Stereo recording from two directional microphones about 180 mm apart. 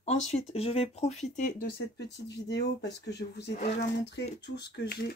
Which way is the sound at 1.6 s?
65° left (ahead or behind).